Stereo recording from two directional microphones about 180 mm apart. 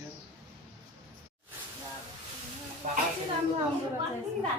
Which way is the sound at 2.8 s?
50° right (ahead or behind).